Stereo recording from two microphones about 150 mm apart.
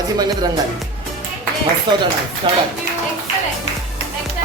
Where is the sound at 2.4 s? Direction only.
35° right (ahead or behind).